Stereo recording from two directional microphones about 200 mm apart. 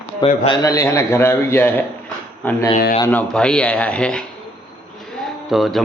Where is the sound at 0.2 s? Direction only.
25° left (ahead or behind); by 2.6 s 10° left (ahead or behind).